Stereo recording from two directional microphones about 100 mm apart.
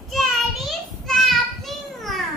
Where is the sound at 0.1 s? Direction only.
Centre (ahead or behind).